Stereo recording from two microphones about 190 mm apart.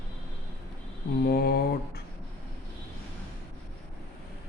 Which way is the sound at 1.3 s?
55° left (ahead or behind).